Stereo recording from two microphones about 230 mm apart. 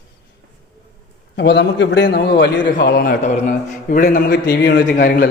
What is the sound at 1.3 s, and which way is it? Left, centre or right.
A man's voice, left.